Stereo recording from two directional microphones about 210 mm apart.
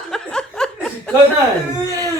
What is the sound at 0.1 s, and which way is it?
Chuckle, 5° left (ahead or behind).